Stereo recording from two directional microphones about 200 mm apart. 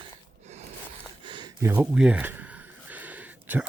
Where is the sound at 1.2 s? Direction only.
20° right (ahead or behind).